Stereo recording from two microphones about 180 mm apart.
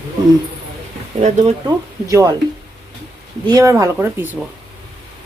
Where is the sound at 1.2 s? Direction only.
40° right (ahead or behind).